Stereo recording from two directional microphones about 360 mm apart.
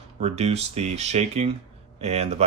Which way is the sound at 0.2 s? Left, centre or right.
Centre.